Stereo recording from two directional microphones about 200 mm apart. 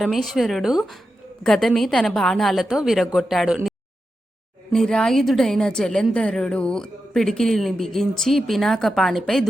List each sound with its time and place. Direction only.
0.0 s a woman's voice: centre (ahead or behind)